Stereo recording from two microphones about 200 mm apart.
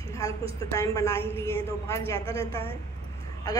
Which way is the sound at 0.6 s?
15° left (ahead or behind).